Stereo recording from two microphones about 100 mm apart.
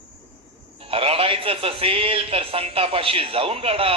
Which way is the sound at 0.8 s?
70° right (ahead or behind).